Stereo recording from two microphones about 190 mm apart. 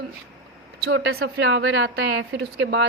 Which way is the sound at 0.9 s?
65° right (ahead or behind).